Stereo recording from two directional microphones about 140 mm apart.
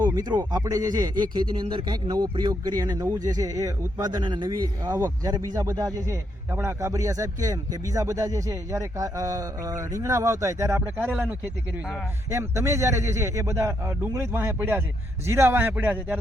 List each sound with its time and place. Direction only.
0.0 s a man's voice: 30° right (ahead or behind); by 16.1 s 10° right (ahead or behind)